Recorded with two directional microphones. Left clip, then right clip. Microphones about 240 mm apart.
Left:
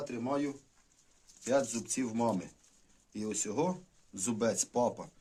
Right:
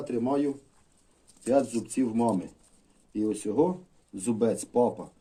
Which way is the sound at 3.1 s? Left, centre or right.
Left.